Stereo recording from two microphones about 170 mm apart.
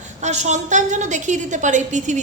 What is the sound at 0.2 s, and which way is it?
A woman's voice, 40° right (ahead or behind).